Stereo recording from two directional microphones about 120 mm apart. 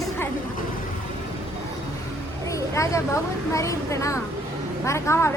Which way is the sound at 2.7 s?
25° left (ahead or behind).